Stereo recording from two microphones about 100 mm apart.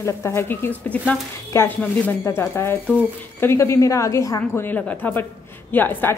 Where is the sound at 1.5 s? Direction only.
30° left (ahead or behind).